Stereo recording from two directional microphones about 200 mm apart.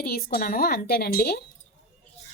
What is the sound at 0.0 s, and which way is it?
A woman's voice, 50° left (ahead or behind).